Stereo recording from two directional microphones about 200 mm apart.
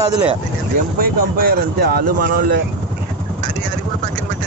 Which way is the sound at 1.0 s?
45° right (ahead or behind).